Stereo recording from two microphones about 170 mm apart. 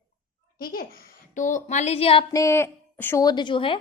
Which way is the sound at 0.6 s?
60° left (ahead or behind).